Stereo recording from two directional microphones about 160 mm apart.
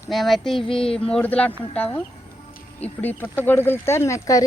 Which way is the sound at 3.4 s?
15° left (ahead or behind).